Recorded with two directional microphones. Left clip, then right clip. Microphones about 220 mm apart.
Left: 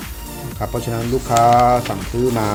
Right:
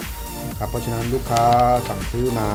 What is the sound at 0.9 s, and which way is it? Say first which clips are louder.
Speech: left 4 dB; centre (ahead or behind).